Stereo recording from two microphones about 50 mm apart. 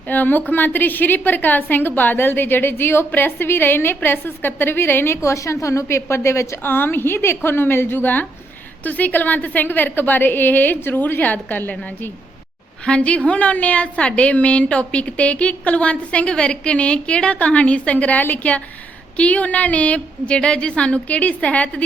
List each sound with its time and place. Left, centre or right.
0.1 s a woman's voice: left
3.1 s a woman's voice: left
5.1 s a woman's voice: left
6.6 s a woman's voice: left
13.0 s a woman's voice: left